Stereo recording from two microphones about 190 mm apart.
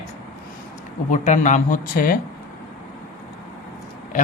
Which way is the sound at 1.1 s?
40° left (ahead or behind).